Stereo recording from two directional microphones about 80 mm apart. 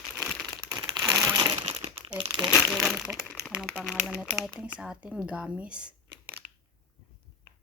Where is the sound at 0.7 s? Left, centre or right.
Right.